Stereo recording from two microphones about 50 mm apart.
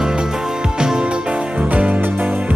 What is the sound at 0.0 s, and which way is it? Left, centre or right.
Music, centre.